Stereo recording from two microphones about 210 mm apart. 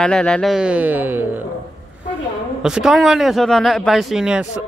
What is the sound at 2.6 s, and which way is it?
A man's voice, 5° right (ahead or behind).